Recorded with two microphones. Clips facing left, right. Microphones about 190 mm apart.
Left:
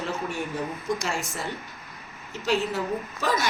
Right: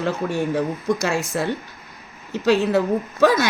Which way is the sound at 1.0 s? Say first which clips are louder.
Right 8 dB; 70° right (ahead or behind).